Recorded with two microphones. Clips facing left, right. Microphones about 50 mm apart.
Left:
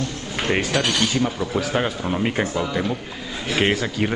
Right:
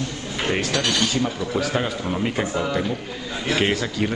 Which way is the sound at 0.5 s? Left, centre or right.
Centre.